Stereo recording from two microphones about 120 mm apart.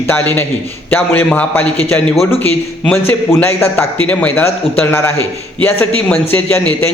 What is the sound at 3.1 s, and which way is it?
A man's voice, 20° left (ahead or behind).